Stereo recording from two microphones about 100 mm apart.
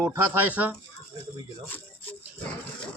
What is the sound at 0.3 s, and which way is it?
Speech, 15° right (ahead or behind).